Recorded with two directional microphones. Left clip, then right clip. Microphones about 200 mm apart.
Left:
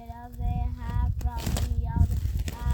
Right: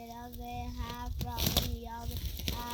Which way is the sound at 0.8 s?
35° right (ahead or behind).